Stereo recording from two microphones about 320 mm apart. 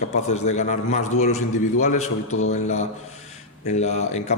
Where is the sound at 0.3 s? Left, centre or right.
Left.